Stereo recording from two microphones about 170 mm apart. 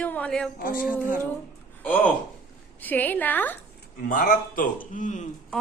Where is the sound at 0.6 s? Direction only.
55° left (ahead or behind).